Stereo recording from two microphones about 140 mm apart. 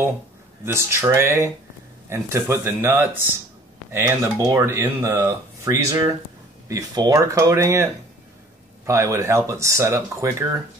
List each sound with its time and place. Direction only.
0.7 s speech: 20° right (ahead or behind)